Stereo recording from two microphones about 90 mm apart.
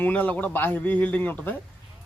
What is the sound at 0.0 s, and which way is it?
Speech, 20° left (ahead or behind).